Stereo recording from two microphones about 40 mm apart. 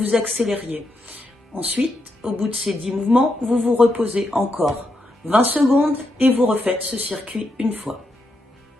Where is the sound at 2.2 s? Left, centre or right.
Right.